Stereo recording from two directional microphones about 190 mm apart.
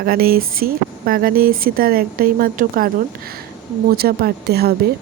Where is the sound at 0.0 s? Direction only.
50° right (ahead or behind).